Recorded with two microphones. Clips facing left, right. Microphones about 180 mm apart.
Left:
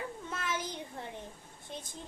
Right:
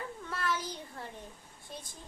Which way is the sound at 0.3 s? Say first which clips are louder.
Right 3 dB; 20° left (ahead or behind).